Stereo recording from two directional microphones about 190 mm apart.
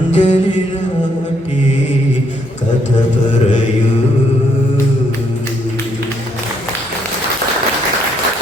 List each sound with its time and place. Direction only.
0.1 s music: 35° left (ahead or behind)